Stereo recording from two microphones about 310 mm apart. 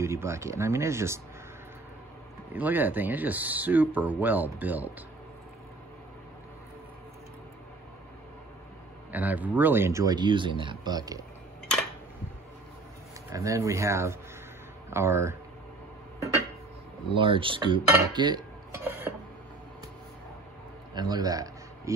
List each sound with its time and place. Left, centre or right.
0.0 s speech: centre
2.5 s speech: centre
9.1 s speech: centre
13.3 s speech: centre
17.1 s speech: centre
18.1 s dishes: centre
20.9 s speech: centre